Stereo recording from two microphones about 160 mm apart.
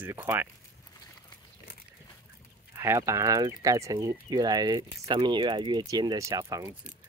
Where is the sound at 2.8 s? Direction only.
15° right (ahead or behind).